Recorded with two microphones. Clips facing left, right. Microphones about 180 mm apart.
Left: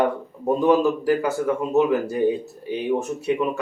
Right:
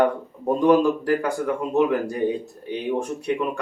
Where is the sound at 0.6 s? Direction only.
5° left (ahead or behind).